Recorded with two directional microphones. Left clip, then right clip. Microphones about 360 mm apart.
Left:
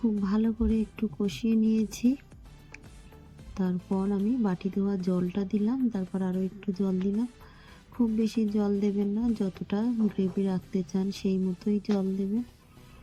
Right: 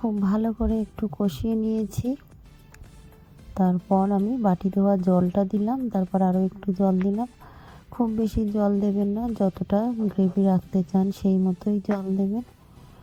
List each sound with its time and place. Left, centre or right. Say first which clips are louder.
0.2 s speech: right 3 dB; centre
3.5 s speech: right 9 dB; centre